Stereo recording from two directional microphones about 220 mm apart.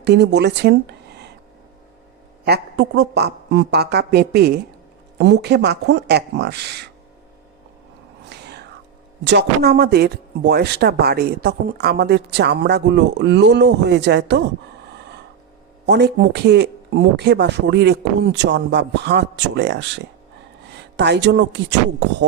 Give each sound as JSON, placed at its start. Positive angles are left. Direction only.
{"t": 0.0, "sound": "speech", "side_deg": -50}
{"t": 2.4, "sound": "speech", "side_deg": -45}
{"t": 8.3, "sound": "whispering", "side_deg": -50}
{"t": 9.2, "sound": "speech", "side_deg": -50}
{"t": 15.9, "sound": "speech", "side_deg": -50}